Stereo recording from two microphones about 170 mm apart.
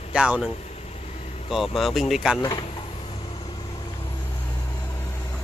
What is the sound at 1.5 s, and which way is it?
Speech, centre (ahead or behind).